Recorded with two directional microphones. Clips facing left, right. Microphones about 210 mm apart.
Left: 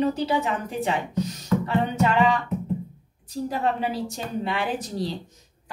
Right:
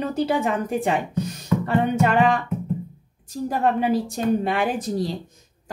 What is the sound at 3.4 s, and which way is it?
A woman's voice, 50° right (ahead or behind).